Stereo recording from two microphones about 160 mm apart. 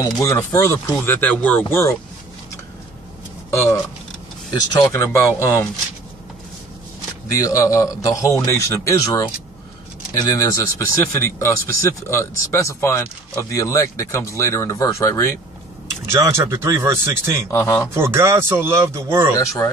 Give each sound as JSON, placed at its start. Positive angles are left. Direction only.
{"t": 0.0, "sound": "speech", "side_deg": 20}
{"t": 3.4, "sound": "speech", "side_deg": 15}
{"t": 7.2, "sound": "speech", "side_deg": 20}
{"t": 10.2, "sound": "speech", "side_deg": 20}
{"t": 16.1, "sound": "speech", "side_deg": -15}
{"t": 17.5, "sound": "speech", "side_deg": 15}
{"t": 17.9, "sound": "speech", "side_deg": -15}
{"t": 19.3, "sound": "speech", "side_deg": 20}